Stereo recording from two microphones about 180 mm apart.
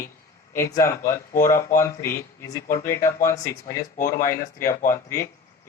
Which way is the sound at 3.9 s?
50° left (ahead or behind).